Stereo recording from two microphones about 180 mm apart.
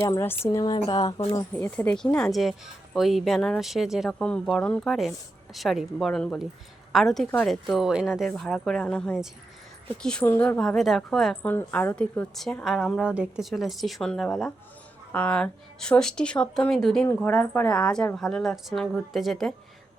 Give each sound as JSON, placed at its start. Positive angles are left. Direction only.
{"t": 0.0, "sound": "a woman's voice", "side_deg": 15}
{"t": 1.5, "sound": "a woman's voice", "side_deg": 10}